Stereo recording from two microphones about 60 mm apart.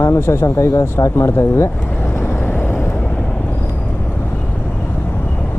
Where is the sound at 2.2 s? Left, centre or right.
Left.